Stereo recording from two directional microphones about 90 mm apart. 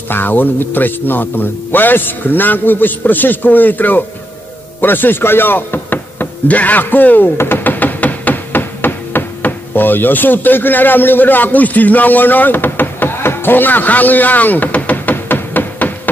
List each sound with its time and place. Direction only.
0.1 s speech: 20° left (ahead or behind)
4.8 s knock: 20° left (ahead or behind)